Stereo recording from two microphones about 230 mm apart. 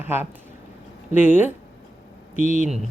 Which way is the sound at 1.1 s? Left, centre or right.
Left.